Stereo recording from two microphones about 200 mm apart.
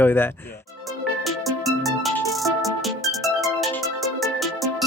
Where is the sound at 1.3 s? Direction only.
Centre (ahead or behind).